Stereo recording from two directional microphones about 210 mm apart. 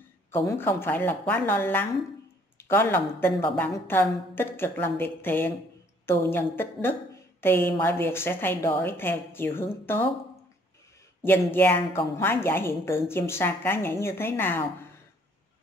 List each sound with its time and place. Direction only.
0.3 s a woman's voice: 15° left (ahead or behind)
11.2 s a woman's voice: 10° left (ahead or behind)